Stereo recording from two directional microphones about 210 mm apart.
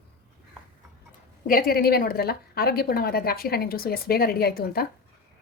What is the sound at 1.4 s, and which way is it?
A woman's voice, 45° left (ahead or behind).